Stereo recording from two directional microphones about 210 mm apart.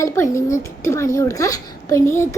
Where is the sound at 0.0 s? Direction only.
15° left (ahead or behind).